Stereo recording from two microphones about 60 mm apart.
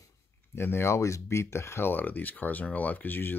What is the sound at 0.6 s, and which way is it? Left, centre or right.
Speech, left.